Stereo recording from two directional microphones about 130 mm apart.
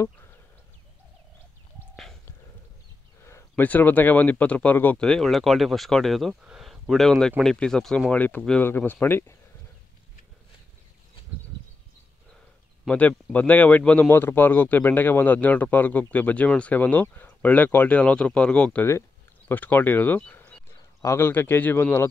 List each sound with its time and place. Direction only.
3.3 s speech: 20° left (ahead or behind)
5.0 s speech: centre (ahead or behind)
12.8 s speech: 10° left (ahead or behind)
20.7 s speech: 20° left (ahead or behind)